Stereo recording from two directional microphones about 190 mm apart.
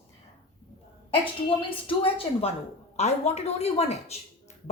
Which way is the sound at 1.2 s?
25° left (ahead or behind).